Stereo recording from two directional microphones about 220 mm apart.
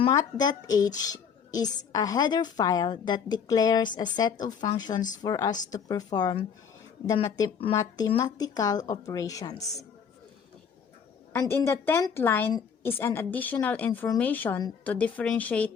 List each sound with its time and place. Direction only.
0.0 s speech: 15° left (ahead or behind)
11.3 s speech: 10° left (ahead or behind)